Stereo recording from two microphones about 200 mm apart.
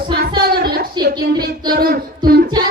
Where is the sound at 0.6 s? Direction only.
50° right (ahead or behind).